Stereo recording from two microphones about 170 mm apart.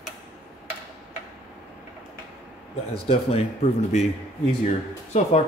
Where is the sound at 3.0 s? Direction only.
40° left (ahead or behind).